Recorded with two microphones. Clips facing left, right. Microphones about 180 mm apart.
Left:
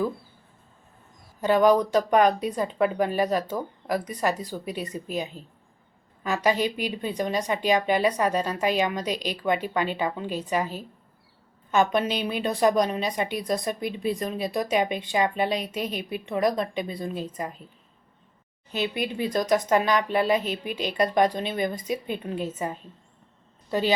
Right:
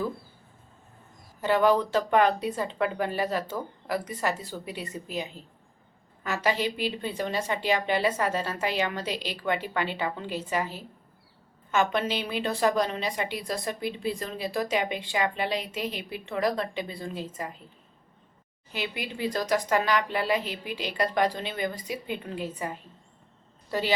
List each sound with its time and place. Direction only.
1.4 s a woman's voice: 15° left (ahead or behind)
18.7 s a woman's voice: 20° left (ahead or behind)